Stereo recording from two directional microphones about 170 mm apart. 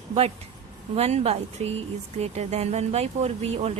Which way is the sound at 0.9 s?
40° right (ahead or behind).